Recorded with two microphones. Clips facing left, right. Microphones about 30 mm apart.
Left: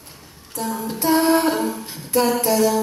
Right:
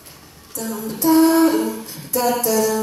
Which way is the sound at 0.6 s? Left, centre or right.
Left.